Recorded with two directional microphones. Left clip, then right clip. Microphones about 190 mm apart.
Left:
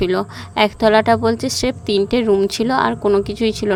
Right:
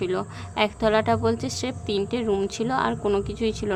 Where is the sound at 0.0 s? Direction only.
30° left (ahead or behind).